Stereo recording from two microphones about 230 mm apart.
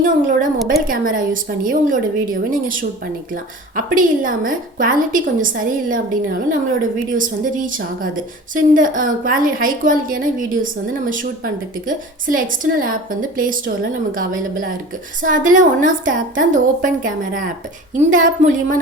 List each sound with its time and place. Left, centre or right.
0.0 s a woman's voice: right